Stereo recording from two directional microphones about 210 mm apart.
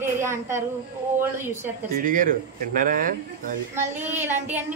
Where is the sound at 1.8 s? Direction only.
40° right (ahead or behind).